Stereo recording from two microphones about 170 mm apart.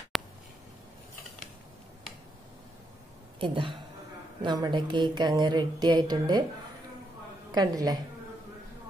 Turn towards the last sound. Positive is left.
turn(degrees=-20)  # may be behind; listen again after turning